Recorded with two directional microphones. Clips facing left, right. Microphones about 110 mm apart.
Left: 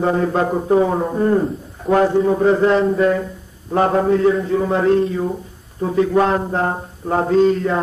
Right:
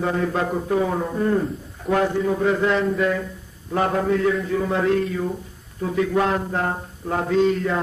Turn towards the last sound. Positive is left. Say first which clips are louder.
# left 5 dB
turn(degrees=35)  # may be behind; listen again after turning